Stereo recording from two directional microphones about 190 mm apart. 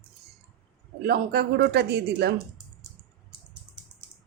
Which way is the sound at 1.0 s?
55° right (ahead or behind).